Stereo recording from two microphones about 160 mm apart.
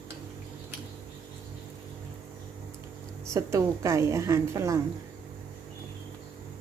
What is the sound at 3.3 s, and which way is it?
A woman's voice, 20° right (ahead or behind).